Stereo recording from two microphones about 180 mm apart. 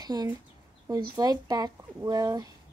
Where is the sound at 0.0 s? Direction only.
20° right (ahead or behind).